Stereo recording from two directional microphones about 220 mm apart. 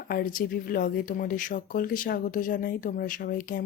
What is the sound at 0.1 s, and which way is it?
A woman's voice, 40° left (ahead or behind).